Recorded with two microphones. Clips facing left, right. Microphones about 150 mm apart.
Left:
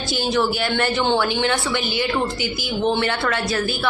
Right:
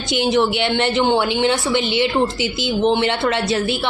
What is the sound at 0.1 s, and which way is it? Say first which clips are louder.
A woman's voice: right 4 dB; 20° right (ahead or behind).